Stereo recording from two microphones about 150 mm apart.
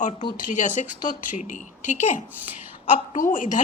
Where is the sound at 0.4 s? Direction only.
55° left (ahead or behind).